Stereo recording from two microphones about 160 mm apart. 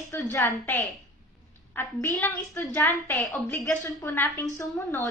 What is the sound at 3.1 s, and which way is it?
Speech, 5° left (ahead or behind).